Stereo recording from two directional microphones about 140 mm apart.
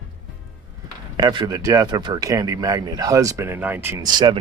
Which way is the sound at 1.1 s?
30° right (ahead or behind).